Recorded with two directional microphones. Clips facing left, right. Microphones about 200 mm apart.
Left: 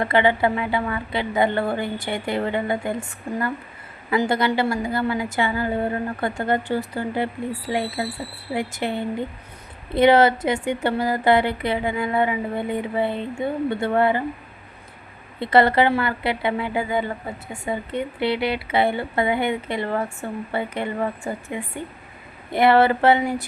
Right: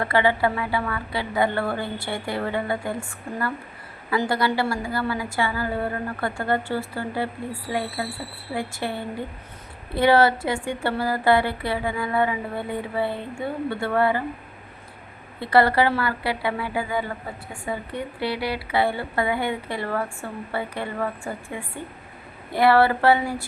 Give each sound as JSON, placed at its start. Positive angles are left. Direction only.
{"t": 0.0, "sound": "speech", "side_deg": 20}
{"t": 15.4, "sound": "speech", "side_deg": 20}